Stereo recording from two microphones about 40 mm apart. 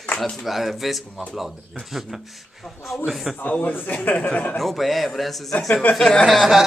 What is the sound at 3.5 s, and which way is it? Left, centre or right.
A man's voice, left.